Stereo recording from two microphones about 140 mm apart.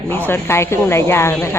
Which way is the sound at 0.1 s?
15° left (ahead or behind).